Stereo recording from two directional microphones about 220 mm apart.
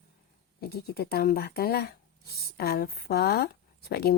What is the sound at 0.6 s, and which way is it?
Speech, 45° left (ahead or behind).